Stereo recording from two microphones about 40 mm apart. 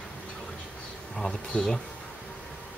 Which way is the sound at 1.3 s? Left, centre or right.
Left.